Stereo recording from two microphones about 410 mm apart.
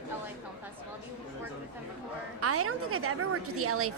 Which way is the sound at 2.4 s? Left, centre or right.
Right.